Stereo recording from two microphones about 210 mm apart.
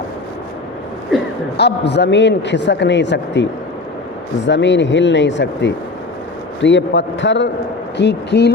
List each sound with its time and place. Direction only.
1.5 s a man's voice: 55° left (ahead or behind)
4.4 s a man's voice: 55° left (ahead or behind)